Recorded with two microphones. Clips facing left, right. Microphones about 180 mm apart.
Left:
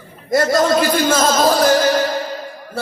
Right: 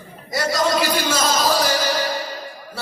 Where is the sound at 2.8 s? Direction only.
50° left (ahead or behind).